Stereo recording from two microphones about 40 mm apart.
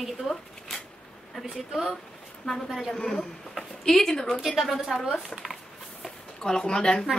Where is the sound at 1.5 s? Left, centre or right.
Centre.